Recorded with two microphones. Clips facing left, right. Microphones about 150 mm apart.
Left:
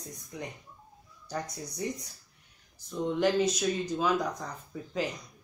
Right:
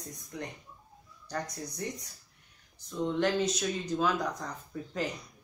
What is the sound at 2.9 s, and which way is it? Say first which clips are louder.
Speech: left 2 dB; 5° left (ahead or behind).